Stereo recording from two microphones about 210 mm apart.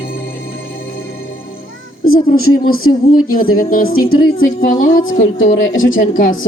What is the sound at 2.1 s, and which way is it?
A woman's voice, 45° left (ahead or behind).